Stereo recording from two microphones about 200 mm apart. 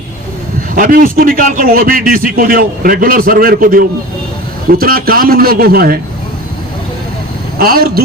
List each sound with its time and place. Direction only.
0.8 s a man's voice: 45° right (ahead or behind)
7.6 s a man's voice: 50° right (ahead or behind)